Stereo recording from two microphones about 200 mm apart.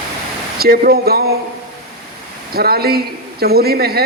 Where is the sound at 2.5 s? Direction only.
50° right (ahead or behind).